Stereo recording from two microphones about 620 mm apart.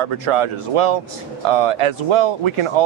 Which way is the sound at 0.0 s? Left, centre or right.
Right.